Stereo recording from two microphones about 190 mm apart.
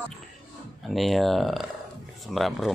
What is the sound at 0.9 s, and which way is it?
Speech, centre (ahead or behind).